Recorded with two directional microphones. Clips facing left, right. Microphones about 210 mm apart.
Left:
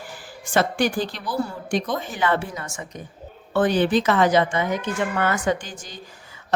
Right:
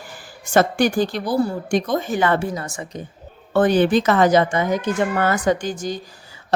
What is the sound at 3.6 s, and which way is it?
Speech, 45° right (ahead or behind).